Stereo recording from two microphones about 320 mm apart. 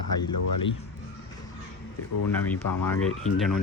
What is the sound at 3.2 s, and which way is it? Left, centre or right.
Speech, centre.